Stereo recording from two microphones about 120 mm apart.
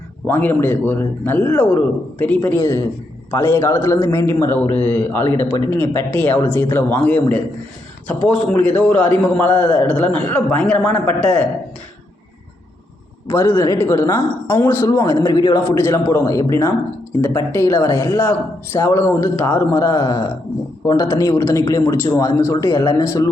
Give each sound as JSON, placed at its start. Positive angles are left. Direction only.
{"t": 0.3, "sound": "speech", "side_deg": 20}
{"t": 13.2, "sound": "a man's voice", "side_deg": 25}
{"t": 15.7, "sound": "speech", "side_deg": 20}